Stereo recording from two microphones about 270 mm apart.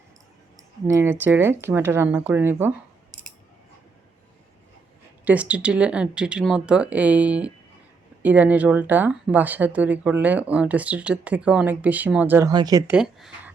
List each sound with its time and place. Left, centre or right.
0.9 s speech: centre
5.2 s speech: centre
13.0 s speech: centre